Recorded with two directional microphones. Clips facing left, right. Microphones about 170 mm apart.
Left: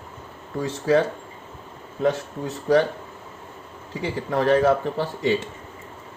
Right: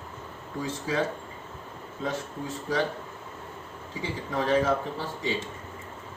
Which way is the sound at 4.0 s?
65° left (ahead or behind).